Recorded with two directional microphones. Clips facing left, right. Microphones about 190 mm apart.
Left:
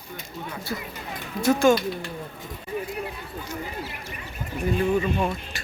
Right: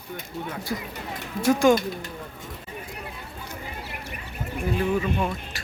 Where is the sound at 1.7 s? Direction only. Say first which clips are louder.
Even; 45° right (ahead or behind).